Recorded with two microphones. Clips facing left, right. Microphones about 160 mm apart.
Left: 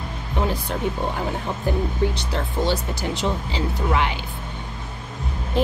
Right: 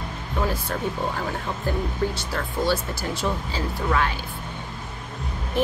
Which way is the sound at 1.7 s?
15° left (ahead or behind).